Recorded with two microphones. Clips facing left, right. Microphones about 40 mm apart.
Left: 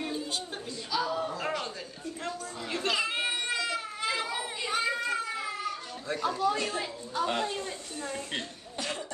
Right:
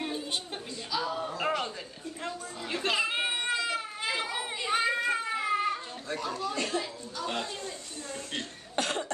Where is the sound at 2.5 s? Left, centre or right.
Centre.